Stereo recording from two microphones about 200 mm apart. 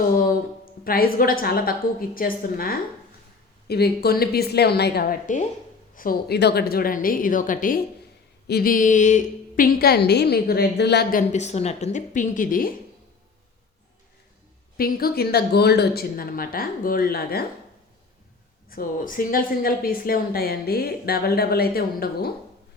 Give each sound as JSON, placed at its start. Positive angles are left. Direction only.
{"t": 0.2, "sound": "speech", "side_deg": 45}
{"t": 11.3, "sound": "a woman's voice", "side_deg": 35}
{"t": 14.8, "sound": "speech", "side_deg": 45}
{"t": 18.7, "sound": "speech", "side_deg": 45}